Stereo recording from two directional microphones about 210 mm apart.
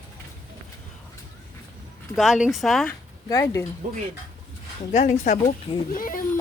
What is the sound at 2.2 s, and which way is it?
Speech, centre (ahead or behind).